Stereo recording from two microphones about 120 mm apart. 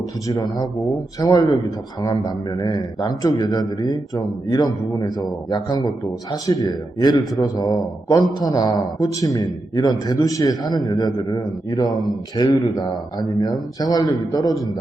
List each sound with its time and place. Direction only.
0.3 s a man's voice: 30° left (ahead or behind)